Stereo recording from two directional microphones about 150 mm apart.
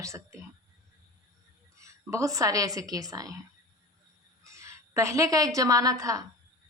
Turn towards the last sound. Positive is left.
turn(degrees=-20)  # may be behind; listen again after turning